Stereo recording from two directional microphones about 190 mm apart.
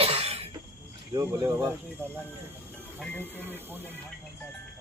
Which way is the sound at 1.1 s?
20° right (ahead or behind).